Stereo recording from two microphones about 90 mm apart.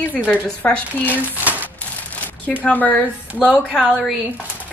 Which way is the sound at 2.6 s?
20° left (ahead or behind).